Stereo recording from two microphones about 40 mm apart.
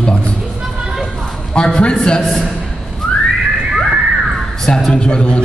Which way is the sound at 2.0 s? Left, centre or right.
Centre.